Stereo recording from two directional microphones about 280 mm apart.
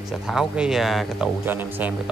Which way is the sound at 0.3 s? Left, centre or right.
Centre.